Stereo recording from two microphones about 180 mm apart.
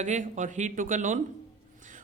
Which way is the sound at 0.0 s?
45° right (ahead or behind).